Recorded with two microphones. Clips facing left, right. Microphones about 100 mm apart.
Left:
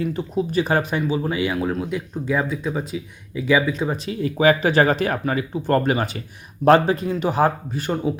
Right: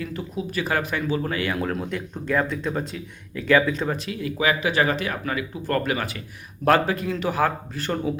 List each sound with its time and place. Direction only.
0.0 s speech: 20° left (ahead or behind)
4.1 s speech: 35° left (ahead or behind); by 8.1 s 15° left (ahead or behind)